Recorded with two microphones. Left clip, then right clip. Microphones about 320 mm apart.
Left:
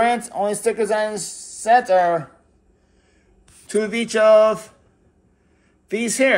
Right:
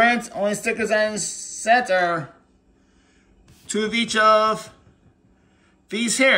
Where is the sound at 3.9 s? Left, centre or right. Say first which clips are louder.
Right 1 dB; left.